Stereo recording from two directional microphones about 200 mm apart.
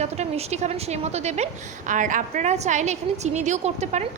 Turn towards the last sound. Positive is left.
turn(degrees=-35)  # may be behind; listen again after turning